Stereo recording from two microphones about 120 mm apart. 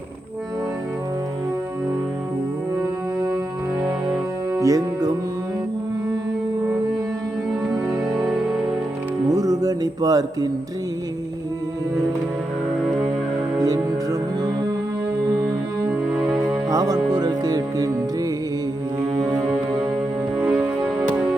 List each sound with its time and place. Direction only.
4.5 s music: 30° right (ahead or behind)
7.7 s music: 30° right (ahead or behind)
8.2 s music: centre (ahead or behind)
9.3 s music: 30° right (ahead or behind)
13.6 s music: 30° right (ahead or behind)
15.9 s music: 10° right (ahead or behind)
16.4 s music: 30° right (ahead or behind)
19.3 s music: 5° right (ahead or behind)